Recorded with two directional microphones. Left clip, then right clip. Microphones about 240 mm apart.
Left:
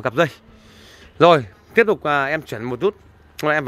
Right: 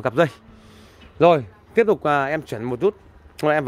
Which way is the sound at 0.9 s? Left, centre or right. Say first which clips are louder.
Left 3 dB; centre.